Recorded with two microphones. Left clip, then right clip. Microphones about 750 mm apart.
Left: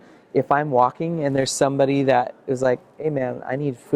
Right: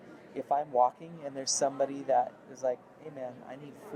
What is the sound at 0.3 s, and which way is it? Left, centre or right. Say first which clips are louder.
Speech: left 10 dB; left.